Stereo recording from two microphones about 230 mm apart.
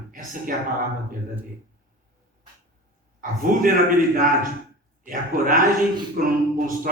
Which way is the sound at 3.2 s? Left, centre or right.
Right.